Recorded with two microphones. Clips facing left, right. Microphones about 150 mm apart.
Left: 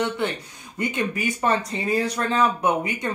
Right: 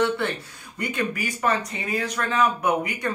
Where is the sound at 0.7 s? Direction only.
20° left (ahead or behind).